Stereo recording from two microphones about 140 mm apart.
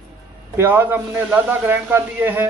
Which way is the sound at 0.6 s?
15° right (ahead or behind).